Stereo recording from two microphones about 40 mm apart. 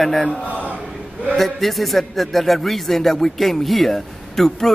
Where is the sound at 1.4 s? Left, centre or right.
Centre.